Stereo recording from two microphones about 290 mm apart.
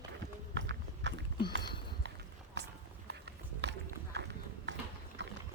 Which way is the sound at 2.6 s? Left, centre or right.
Right.